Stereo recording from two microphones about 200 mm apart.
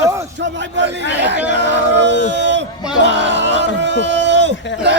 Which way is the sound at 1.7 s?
60° right (ahead or behind).